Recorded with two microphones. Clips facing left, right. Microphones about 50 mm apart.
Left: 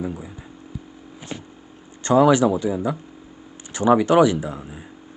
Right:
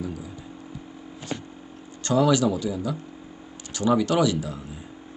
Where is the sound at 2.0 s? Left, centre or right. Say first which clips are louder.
Left 5 dB; left.